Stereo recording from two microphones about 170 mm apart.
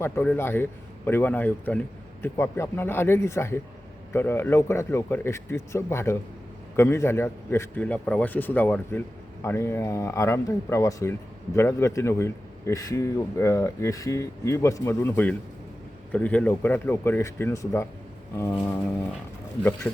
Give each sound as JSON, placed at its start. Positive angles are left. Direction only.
{"t": 0.0, "sound": "a man's voice", "side_deg": 10}